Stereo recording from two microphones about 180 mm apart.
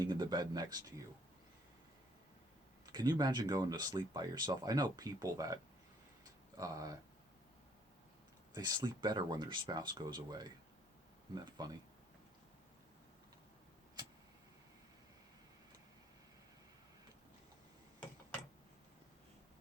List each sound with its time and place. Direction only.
0.0 s speech: 20° right (ahead or behind)
2.8 s speech: 25° right (ahead or behind)
6.6 s speech: 20° right (ahead or behind)
8.5 s speech: 20° right (ahead or behind)
11.5 s speech: 25° right (ahead or behind)